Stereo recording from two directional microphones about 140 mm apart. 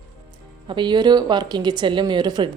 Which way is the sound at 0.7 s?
35° right (ahead or behind).